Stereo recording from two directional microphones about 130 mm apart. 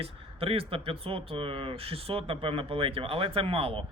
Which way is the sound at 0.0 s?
50° right (ahead or behind).